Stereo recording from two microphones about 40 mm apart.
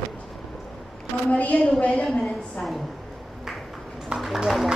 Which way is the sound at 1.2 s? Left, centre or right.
Left.